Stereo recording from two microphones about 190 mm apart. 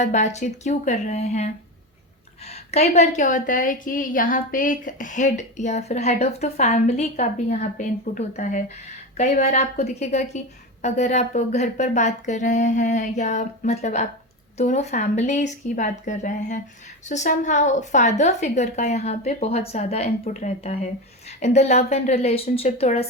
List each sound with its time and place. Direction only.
0.0 s a woman's voice: 40° left (ahead or behind)